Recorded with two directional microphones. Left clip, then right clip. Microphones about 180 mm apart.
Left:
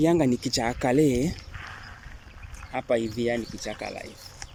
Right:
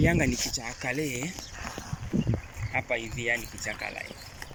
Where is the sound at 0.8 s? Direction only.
40° left (ahead or behind).